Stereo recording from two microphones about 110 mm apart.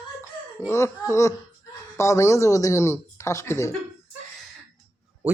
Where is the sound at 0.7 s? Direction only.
25° left (ahead or behind).